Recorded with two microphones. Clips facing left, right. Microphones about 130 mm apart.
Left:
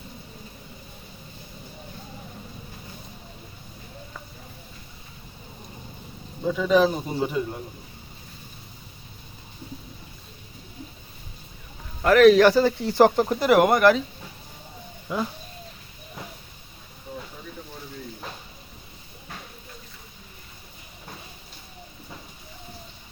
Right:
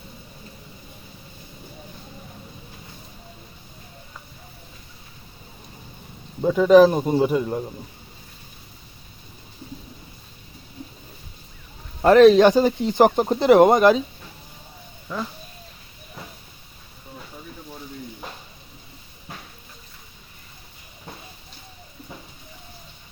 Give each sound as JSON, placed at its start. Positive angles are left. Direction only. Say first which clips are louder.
{"t": 6.4, "sound": "a man's voice", "louder": "right 7 dB", "side_deg": -50}
{"t": 12.0, "sound": "speech", "louder": "right 3 dB", "side_deg": -25}
{"t": 15.1, "sound": "speech", "louder": "left 2 dB", "side_deg": 10}